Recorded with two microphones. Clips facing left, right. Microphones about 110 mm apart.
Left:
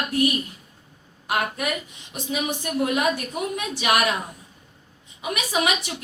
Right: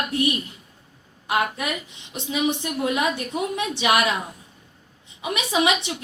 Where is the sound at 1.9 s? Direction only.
25° right (ahead or behind).